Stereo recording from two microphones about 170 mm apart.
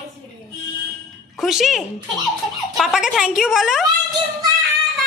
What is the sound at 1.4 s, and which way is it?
A woman's voice, centre (ahead or behind).